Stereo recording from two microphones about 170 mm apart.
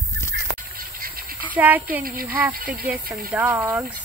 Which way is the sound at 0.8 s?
60° right (ahead or behind).